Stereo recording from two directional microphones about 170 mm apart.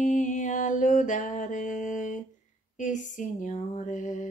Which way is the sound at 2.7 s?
45° left (ahead or behind).